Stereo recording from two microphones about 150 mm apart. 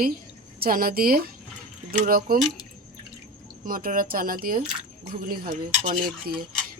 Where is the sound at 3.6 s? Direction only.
65° right (ahead or behind).